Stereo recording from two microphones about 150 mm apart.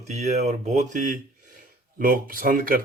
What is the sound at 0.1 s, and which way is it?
Speech, 50° right (ahead or behind).